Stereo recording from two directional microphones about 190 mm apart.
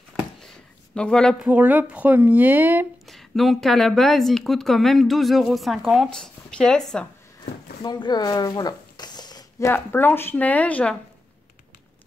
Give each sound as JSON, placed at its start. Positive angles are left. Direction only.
{"t": 0.9, "sound": "speech", "side_deg": 5}
{"t": 1.5, "sound": "speech", "side_deg": -10}
{"t": 3.1, "sound": "speech", "side_deg": 0}
{"t": 7.8, "sound": "speech", "side_deg": 20}